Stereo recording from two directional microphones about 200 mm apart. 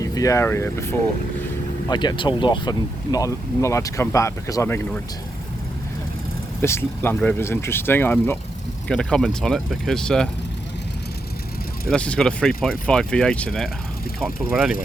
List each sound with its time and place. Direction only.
0.0 s speech: 15° left (ahead or behind)
6.6 s speech: 10° left (ahead or behind)
11.9 s speech: 5° left (ahead or behind)